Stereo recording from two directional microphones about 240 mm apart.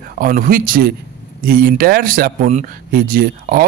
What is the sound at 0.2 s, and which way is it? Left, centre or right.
Speech, right.